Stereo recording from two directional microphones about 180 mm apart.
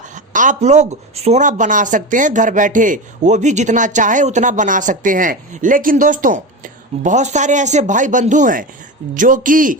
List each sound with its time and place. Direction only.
0.1 s speech: 45° right (ahead or behind)